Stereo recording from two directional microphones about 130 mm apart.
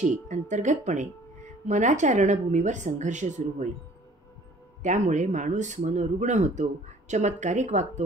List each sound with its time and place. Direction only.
0.0 s speech: 70° right (ahead or behind)
4.8 s speech: 70° right (ahead or behind)